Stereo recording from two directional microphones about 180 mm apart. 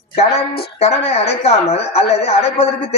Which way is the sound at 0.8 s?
35° left (ahead or behind).